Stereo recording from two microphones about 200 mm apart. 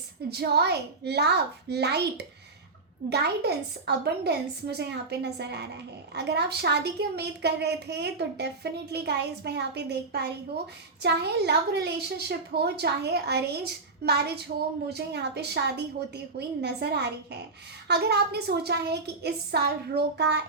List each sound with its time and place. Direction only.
0.3 s a woman's voice: 55° right (ahead or behind)